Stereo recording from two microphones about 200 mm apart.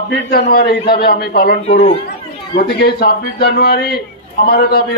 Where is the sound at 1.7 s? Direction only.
30° left (ahead or behind).